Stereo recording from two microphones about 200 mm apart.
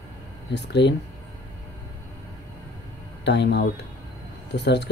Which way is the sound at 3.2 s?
60° left (ahead or behind).